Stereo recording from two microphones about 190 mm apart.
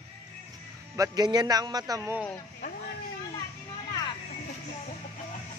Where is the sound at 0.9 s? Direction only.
20° right (ahead or behind).